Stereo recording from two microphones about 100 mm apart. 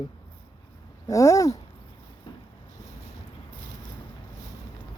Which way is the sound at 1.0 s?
30° left (ahead or behind).